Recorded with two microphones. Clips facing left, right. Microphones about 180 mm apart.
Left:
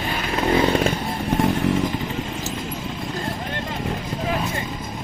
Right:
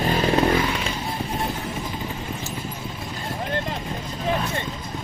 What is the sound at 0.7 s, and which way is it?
Chainsaw, 45° left (ahead or behind).